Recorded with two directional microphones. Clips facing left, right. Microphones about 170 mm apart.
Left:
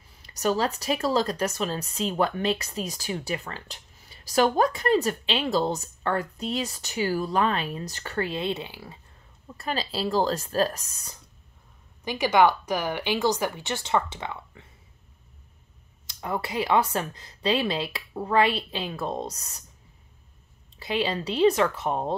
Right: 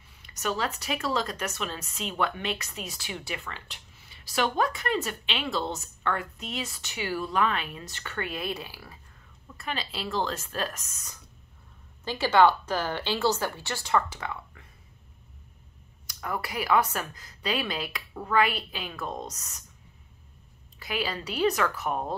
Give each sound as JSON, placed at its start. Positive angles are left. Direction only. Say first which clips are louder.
{"t": 0.2, "sound": "speech", "louder": "left 5 dB", "side_deg": 35}
{"t": 9.6, "sound": "speech", "louder": "left 6 dB", "side_deg": 35}
{"t": 12.0, "sound": "a woman's voice", "louder": "left 1 dB", "side_deg": 15}
{"t": 16.1, "sound": "speech", "louder": "left 3 dB", "side_deg": 25}
{"t": 20.8, "sound": "speech", "louder": "left 5 dB", "side_deg": 25}